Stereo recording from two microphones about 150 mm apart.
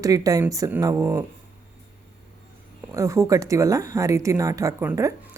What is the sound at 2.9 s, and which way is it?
Speech, 20° right (ahead or behind).